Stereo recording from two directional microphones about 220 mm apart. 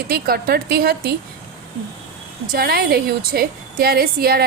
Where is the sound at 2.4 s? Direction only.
45° right (ahead or behind).